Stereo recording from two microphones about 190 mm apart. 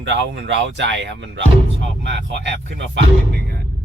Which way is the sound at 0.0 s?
70° right (ahead or behind).